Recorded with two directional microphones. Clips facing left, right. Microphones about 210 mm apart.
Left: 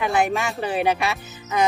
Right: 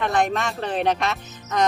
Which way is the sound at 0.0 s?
10° left (ahead or behind).